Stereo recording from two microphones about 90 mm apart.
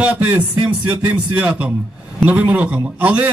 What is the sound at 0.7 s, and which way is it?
A man's voice, 15° right (ahead or behind).